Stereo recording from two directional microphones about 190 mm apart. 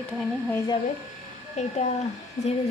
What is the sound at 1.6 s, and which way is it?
Speech, 35° left (ahead or behind).